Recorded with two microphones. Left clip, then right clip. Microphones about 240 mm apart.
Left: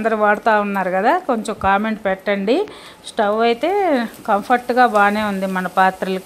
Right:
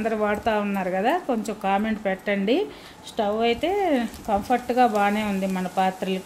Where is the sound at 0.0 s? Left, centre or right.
Centre.